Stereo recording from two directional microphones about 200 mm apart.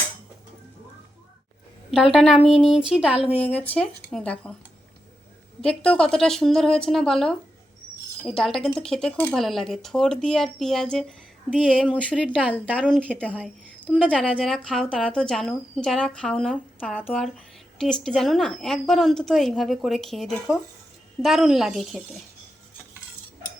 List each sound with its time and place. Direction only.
1.9 s speech: centre (ahead or behind)
3.2 s speech: 30° left (ahead or behind)
3.5 s speech: 5° left (ahead or behind)
5.6 s speech: 5° left (ahead or behind)
8.4 s speech: centre (ahead or behind)
11.9 s a woman's voice: 5° right (ahead or behind)